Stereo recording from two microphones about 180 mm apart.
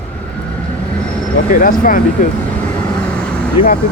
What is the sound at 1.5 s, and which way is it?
Speech, 50° left (ahead or behind).